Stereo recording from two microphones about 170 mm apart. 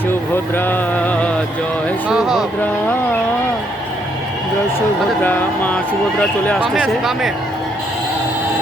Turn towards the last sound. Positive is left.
turn(degrees=0)  # may be behind; listen again after turning